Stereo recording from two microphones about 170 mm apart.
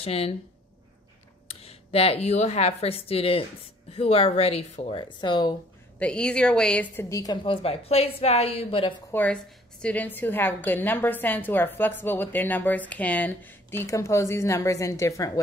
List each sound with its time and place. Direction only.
0.0 s a woman's voice: 35° left (ahead or behind)
1.5 s a woman's voice: 35° left (ahead or behind)
5.0 s speech: 25° left (ahead or behind)
5.9 s a woman's voice: 5° left (ahead or behind)
7.4 s a woman's voice: 35° left (ahead or behind)
9.1 s a woman's voice: 5° left (ahead or behind)